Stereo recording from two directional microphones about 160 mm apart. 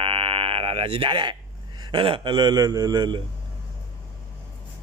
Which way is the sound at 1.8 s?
30° right (ahead or behind).